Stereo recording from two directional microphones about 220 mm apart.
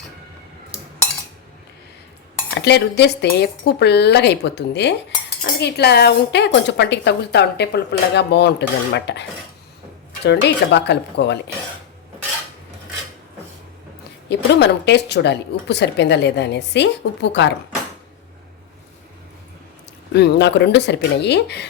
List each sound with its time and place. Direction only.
2.6 s speech: 50° left (ahead or behind)
10.2 s speech: 50° left (ahead or behind)
14.3 s speech: 50° left (ahead or behind)
20.1 s speech: 50° left (ahead or behind)